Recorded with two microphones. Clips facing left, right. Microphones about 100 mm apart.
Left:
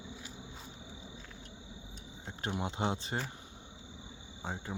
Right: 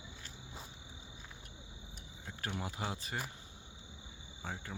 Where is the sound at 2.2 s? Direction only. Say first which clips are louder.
Left 4 dB; 25° left (ahead or behind).